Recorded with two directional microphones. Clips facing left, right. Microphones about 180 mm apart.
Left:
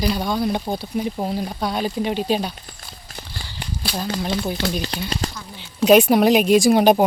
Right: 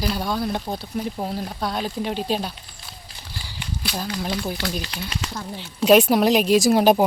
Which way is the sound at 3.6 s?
35° left (ahead or behind).